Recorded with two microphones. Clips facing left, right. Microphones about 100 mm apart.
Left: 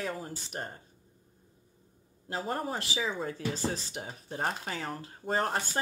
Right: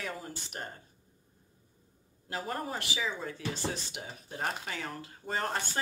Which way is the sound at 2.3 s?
30° left (ahead or behind).